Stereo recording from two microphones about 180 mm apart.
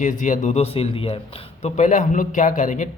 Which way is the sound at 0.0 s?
45° left (ahead or behind).